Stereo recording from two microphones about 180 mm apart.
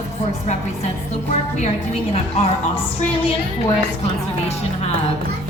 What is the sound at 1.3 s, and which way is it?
Speech, 40° left (ahead or behind).